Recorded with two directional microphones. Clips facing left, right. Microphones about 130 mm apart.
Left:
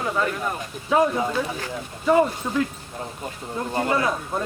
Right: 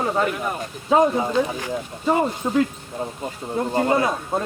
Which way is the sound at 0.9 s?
20° right (ahead or behind).